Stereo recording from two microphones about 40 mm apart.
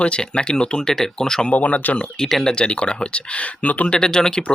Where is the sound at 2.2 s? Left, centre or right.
Centre.